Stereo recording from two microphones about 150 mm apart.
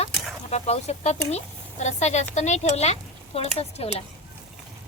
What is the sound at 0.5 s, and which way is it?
A woman's voice, 45° left (ahead or behind).